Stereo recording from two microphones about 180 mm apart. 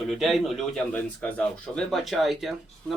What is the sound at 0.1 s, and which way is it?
A man's voice, centre (ahead or behind).